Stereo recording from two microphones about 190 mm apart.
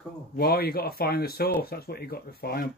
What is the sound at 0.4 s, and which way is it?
Speech, 50° left (ahead or behind).